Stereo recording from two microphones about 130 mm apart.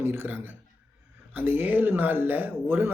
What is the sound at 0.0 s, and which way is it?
Speech, 15° right (ahead or behind).